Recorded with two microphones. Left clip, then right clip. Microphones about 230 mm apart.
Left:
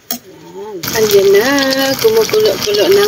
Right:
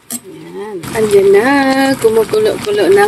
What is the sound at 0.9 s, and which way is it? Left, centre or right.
Speech, centre.